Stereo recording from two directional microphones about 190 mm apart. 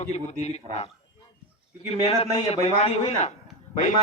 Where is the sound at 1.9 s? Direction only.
35° left (ahead or behind).